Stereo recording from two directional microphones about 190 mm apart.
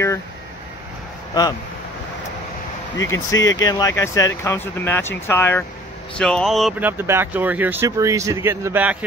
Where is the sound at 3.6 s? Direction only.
20° left (ahead or behind); by 6.9 s centre (ahead or behind).